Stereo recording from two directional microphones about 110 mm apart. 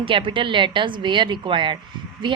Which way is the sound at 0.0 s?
50° right (ahead or behind).